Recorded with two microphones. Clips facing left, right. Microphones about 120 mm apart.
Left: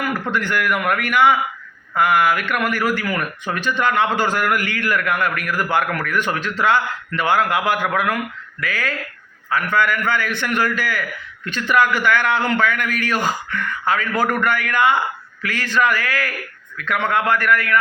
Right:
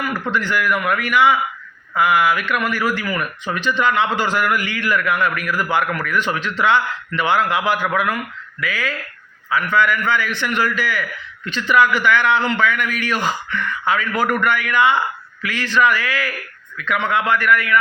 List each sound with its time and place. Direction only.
0.3 s a man's voice: 50° left (ahead or behind)